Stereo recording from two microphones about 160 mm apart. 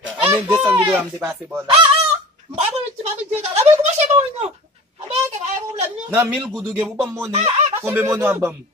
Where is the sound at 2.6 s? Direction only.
40° right (ahead or behind).